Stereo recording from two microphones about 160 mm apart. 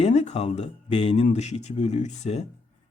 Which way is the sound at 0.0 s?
45° left (ahead or behind).